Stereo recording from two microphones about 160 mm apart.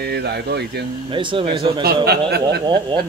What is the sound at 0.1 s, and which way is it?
Speech, 90° right.